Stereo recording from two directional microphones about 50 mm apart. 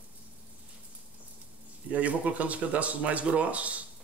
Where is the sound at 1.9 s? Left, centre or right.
Right.